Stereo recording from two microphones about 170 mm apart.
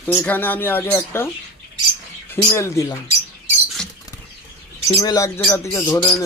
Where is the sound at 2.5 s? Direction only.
15° left (ahead or behind).